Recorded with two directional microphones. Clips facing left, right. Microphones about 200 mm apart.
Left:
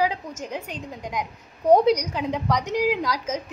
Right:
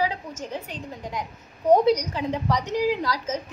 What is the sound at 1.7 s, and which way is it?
A woman's voice, 10° left (ahead or behind).